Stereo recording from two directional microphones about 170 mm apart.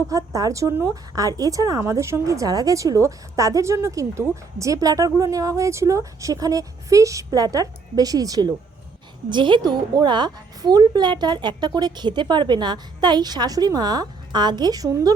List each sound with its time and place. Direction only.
0.1 s a woman's voice: 20° right (ahead or behind)